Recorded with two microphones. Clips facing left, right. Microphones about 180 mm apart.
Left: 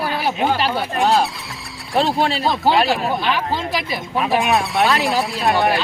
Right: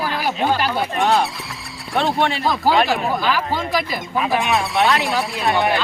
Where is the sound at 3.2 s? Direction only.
25° left (ahead or behind).